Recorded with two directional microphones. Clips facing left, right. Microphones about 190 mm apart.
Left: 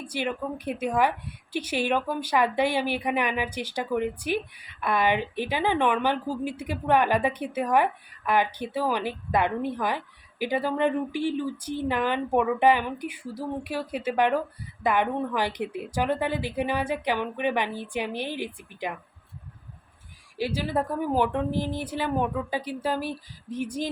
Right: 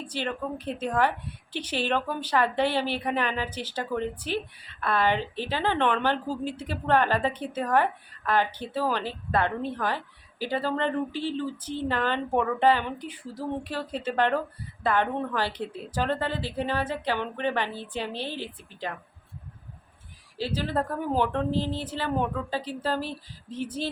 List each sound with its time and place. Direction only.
0.0 s speech: 10° left (ahead or behind)
20.4 s speech: 10° left (ahead or behind)